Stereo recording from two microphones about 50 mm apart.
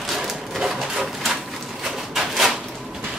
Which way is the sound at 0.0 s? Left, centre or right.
Centre.